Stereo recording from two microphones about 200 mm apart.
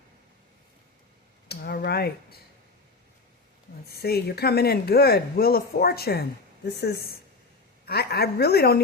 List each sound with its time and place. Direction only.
1.5 s speech: 55° left (ahead or behind)
3.8 s speech: 50° left (ahead or behind)
7.9 s speech: 50° left (ahead or behind)